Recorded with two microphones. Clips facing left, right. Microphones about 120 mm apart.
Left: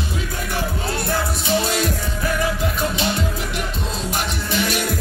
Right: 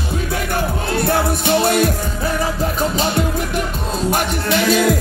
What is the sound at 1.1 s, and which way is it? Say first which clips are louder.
Music: right 5 dB; 60° right (ahead or behind).